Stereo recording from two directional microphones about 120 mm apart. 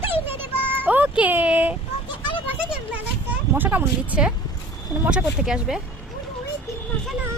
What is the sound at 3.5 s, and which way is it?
A woman's voice, 15° right (ahead or behind).